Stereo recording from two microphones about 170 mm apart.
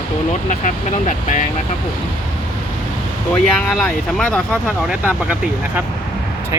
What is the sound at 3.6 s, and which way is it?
Speech, 10° left (ahead or behind).